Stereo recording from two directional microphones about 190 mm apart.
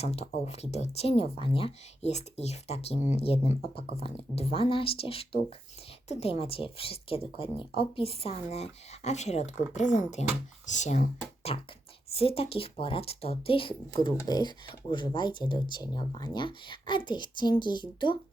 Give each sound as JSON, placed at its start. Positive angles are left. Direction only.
{"t": 0.0, "sound": "speech", "side_deg": 35}